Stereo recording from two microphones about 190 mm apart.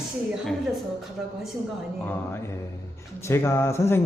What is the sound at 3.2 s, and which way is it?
Speech, 15° left (ahead or behind).